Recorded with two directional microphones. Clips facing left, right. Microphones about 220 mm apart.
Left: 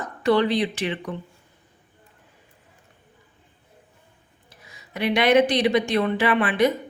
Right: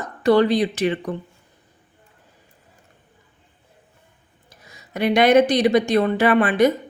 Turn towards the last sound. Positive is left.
turn(degrees=-45)  # may be behind; listen again after turning